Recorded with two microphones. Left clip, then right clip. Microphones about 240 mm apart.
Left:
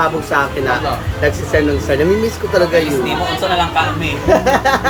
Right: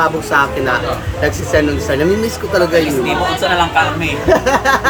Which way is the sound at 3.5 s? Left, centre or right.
Right.